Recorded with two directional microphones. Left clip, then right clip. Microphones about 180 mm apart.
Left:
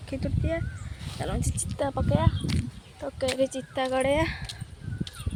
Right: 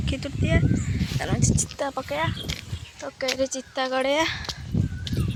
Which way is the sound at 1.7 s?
15° left (ahead or behind).